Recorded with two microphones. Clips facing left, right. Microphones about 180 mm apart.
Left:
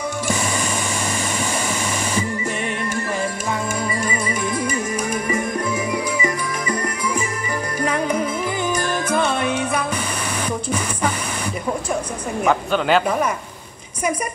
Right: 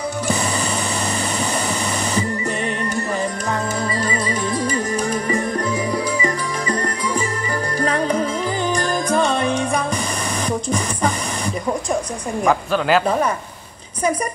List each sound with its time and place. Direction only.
4.0 s music: 10° left (ahead or behind)
10.7 s a sound: 5° left (ahead or behind)
12.4 s a woman's voice: centre (ahead or behind)